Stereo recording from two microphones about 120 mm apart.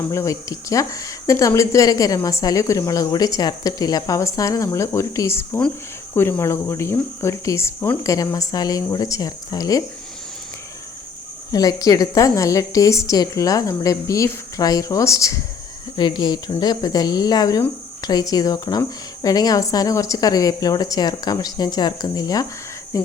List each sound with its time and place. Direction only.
0.1 s speech: 25° left (ahead or behind)
11.5 s speech: 30° left (ahead or behind)
16.0 s speech: 40° left (ahead or behind)
22.9 s cricket: 25° left (ahead or behind)